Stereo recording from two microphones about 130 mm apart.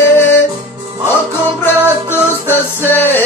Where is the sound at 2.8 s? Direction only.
15° left (ahead or behind).